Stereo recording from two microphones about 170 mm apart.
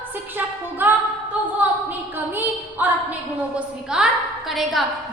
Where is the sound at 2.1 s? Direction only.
10° right (ahead or behind).